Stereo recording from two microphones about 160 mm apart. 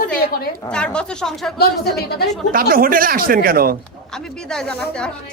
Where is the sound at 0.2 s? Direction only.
75° left (ahead or behind).